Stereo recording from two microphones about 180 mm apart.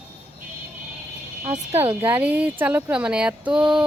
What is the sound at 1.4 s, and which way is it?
Speech, 40° right (ahead or behind).